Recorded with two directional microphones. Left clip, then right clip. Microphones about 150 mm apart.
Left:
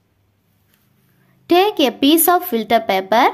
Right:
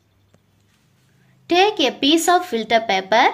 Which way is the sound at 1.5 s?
35° left (ahead or behind).